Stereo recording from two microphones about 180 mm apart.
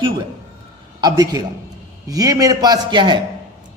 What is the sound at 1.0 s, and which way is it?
A man's voice, 20° right (ahead or behind).